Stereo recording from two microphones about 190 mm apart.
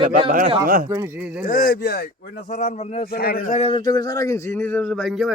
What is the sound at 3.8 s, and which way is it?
Speech, 20° left (ahead or behind).